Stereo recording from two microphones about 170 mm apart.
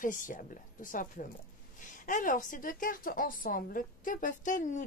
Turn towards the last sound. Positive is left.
turn(degrees=50)  # may be behind; listen again after turning